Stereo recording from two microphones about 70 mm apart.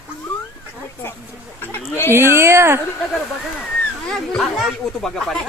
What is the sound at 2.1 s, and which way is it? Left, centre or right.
Speech, right.